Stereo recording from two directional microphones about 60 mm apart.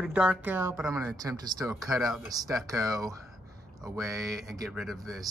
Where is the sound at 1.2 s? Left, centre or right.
Right.